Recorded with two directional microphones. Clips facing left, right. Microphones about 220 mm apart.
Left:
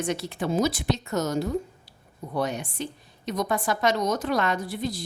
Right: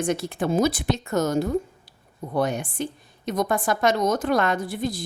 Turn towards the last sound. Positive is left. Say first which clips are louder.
# right 3 dB
turn(degrees=-50)  # may be behind; listen again after turning